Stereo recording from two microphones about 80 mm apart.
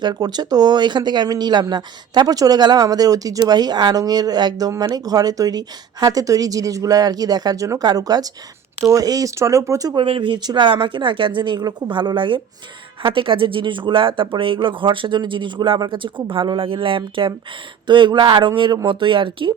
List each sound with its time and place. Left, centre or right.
0.0 s a woman's voice: right
9.9 s speech: right